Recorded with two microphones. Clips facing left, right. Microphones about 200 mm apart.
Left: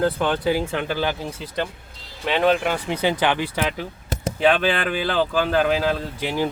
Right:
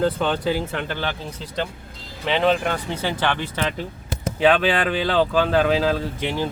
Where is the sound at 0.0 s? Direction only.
5° left (ahead or behind).